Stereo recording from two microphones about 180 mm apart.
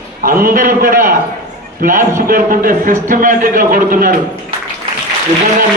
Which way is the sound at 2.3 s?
50° right (ahead or behind).